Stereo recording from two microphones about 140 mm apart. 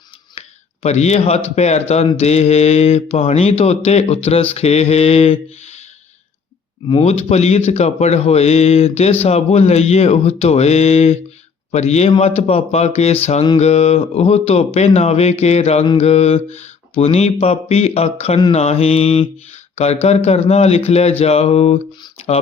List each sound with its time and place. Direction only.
0.3 s a sound: 50° left (ahead or behind)
1.5 s mantra: 50° left (ahead or behind)
7.0 s mantra: 50° left (ahead or behind)
22.2 s speech: 45° left (ahead or behind)